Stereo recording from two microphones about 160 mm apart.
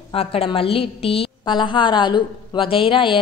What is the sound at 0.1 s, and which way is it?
A woman's voice, 35° left (ahead or behind).